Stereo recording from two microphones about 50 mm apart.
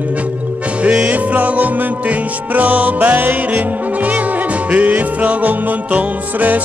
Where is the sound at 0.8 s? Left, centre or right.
Right.